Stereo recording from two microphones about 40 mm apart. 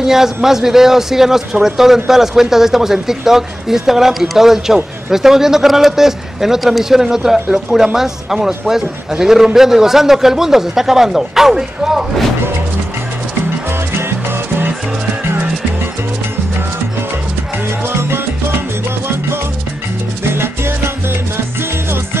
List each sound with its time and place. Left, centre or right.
0.0 s a man's voice: centre
14.0 s music: right
17.8 s salsa music: right
20.3 s salsa music: right